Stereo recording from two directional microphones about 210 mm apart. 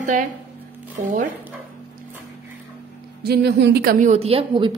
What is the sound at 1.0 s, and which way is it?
Speech, 35° right (ahead or behind).